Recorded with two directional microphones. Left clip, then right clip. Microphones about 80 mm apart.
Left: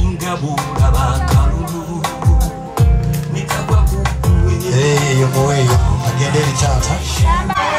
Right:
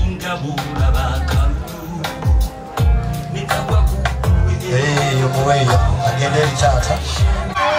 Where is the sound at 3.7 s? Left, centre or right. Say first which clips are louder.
Left 1 dB; left.